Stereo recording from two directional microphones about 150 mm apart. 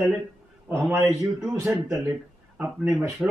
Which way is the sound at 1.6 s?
20° right (ahead or behind).